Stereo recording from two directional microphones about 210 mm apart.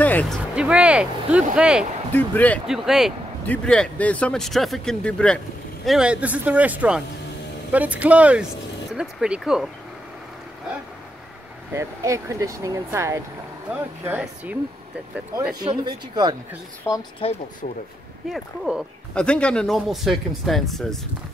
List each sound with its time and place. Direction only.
0.0 s speech: 5° left (ahead or behind)
2.1 s speech: 10° left (ahead or behind)
11.7 s speech: 15° right (ahead or behind)
15.6 s speech: 20° right (ahead or behind)
16.9 s speech: 15° left (ahead or behind)
17.2 s speech: 25° left (ahead or behind)
18.3 s speech: 5° right (ahead or behind)